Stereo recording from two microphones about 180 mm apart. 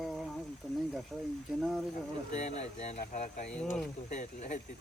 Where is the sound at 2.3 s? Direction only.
40° left (ahead or behind).